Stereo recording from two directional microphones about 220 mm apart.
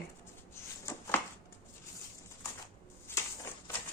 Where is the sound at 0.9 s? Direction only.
10° left (ahead or behind).